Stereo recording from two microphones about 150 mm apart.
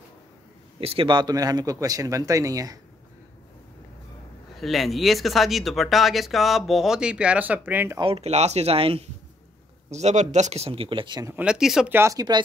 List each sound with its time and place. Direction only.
0.7 s speech: 35° right (ahead or behind)
4.6 s speech: centre (ahead or behind)
8.0 s speech: 45° right (ahead or behind); by 11.3 s 30° right (ahead or behind)
11.3 s speech: 5° right (ahead or behind)
11.9 s speech: 20° right (ahead or behind)